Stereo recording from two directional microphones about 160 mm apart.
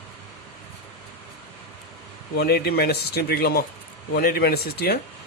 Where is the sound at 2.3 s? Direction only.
85° left.